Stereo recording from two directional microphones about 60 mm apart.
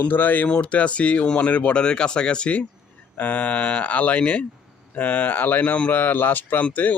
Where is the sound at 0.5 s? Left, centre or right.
Centre.